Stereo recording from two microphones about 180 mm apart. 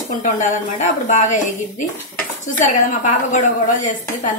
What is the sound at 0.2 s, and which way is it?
A woman's voice, 45° left (ahead or behind).